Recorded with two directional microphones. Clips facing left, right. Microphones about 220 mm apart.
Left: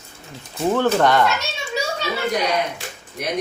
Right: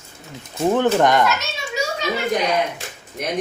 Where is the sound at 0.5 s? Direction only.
20° right (ahead or behind).